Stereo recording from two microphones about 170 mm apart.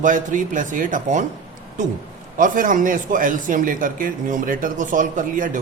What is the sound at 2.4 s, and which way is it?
A man's voice, 50° right (ahead or behind).